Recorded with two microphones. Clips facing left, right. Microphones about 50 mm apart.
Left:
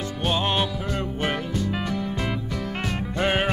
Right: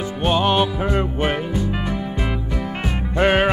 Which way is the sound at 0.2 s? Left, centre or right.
Right.